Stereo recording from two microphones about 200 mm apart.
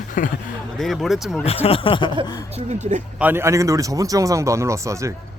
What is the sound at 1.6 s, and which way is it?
Snicker, 25° left (ahead or behind).